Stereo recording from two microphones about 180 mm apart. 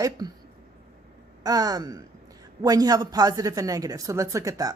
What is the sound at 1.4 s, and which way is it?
A woman's voice, 20° right (ahead or behind).